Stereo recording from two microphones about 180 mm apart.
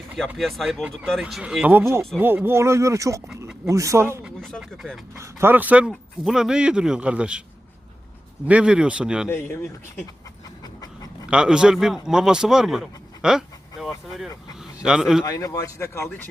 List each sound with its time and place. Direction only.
0.3 s speech: centre (ahead or behind)
4.4 s speech: centre (ahead or behind)
5.1 s speech: 15° right (ahead or behind)
8.4 s speech: 5° right (ahead or behind)
10.6 s dog: 20° left (ahead or behind)
11.3 s speech: 5° right (ahead or behind)
15.2 s speech: 20° left (ahead or behind)